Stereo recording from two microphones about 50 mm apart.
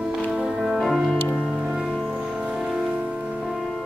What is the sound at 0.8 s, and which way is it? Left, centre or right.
Music, centre.